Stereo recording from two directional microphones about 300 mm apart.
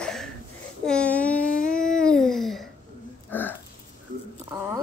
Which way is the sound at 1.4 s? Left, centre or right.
Left.